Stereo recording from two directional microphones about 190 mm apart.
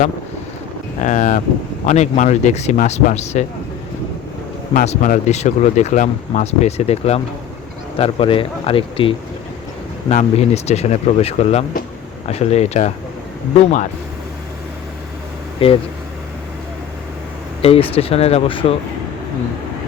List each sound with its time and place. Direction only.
1.0 s speech: 40° left (ahead or behind)
4.7 s speech: 45° left (ahead or behind)
15.6 s speech: 30° left (ahead or behind)
17.6 s speech: 30° left (ahead or behind)